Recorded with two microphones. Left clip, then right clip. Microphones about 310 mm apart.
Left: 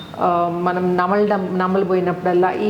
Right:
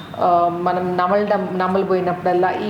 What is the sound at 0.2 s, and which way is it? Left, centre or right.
A woman's voice, left.